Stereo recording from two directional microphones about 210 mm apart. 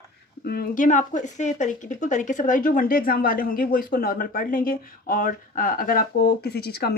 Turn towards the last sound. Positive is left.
turn(degrees=50)  # may be behind; listen again after turning